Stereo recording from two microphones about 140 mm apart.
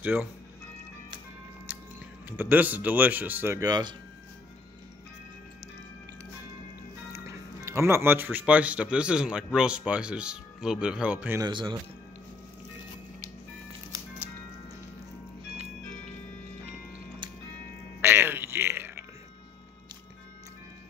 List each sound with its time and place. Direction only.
0.0 s speech: 10° right (ahead or behind)
1.7 s music: 10° right (ahead or behind)
2.2 s speech: 15° right (ahead or behind)
3.6 s speech: 30° right (ahead or behind)
7.2 s speech: 20° right (ahead or behind)
11.3 s speech: 25° right (ahead or behind)
15.5 s music: 50° right (ahead or behind)
18.0 s music: 15° right (ahead or behind)